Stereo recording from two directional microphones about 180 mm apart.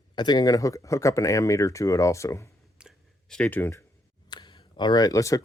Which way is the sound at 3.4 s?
10° left (ahead or behind).